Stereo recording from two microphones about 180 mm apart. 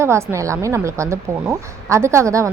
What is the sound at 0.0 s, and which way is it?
A woman's voice, 15° right (ahead or behind).